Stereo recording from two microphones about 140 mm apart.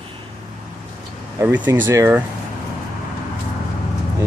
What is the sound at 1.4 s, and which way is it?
Speech, 15° right (ahead or behind).